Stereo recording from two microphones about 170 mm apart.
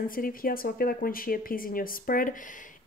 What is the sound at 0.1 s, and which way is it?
A woman's voice, 55° left (ahead or behind).